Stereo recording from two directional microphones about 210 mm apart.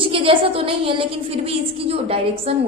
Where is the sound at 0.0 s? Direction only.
25° right (ahead or behind).